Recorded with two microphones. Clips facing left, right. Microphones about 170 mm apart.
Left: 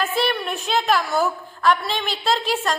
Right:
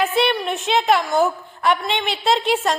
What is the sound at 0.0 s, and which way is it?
A woman's voice, 20° right (ahead or behind).